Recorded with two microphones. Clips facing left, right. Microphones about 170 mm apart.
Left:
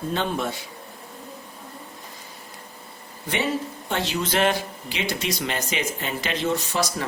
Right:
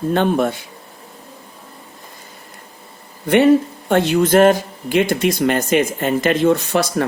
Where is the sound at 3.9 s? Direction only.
55° right (ahead or behind).